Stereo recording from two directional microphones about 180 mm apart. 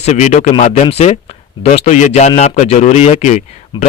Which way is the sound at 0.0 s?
40° left (ahead or behind).